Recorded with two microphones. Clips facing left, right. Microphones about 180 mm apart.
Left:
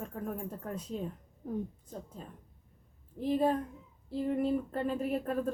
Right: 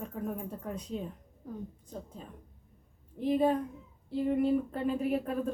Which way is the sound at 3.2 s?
Centre (ahead or behind).